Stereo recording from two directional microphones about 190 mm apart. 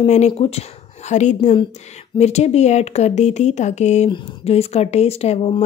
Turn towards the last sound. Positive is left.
turn(degrees=30)  # may be behind; listen again after turning